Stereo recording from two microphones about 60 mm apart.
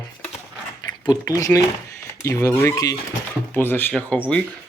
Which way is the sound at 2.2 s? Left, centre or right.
Left.